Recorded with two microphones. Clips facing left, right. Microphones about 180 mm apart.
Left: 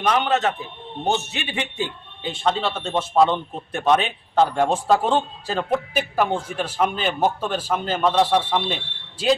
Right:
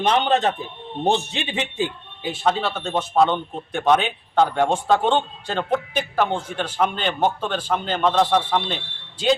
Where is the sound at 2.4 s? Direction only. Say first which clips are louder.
Even; centre (ahead or behind).